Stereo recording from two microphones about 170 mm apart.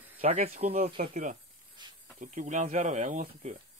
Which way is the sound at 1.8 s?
25° right (ahead or behind).